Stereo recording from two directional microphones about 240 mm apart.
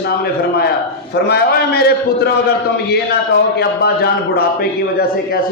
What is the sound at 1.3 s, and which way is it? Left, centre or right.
A man's voice, left.